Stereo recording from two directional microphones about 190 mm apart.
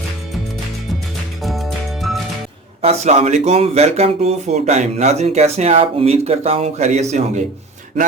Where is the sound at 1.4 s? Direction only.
Centre (ahead or behind).